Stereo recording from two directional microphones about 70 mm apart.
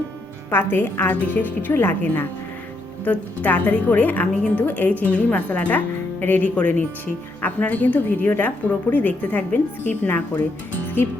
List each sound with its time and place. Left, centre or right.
0.5 s a woman's voice: left